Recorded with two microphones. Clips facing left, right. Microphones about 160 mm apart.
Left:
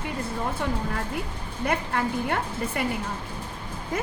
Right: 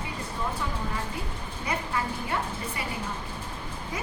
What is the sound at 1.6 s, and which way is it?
A woman's voice, 60° left (ahead or behind).